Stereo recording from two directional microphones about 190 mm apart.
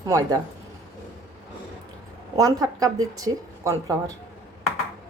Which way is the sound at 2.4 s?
20° right (ahead or behind).